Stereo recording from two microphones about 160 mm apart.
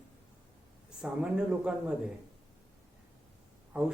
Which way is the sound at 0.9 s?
5° right (ahead or behind).